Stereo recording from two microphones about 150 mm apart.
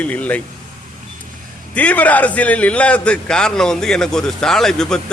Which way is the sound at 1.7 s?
10° left (ahead or behind).